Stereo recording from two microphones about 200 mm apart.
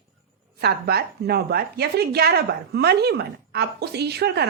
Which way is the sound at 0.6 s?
50° right (ahead or behind).